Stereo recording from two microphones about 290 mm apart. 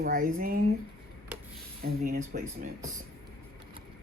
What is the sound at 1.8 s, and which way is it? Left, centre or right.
Speech, right.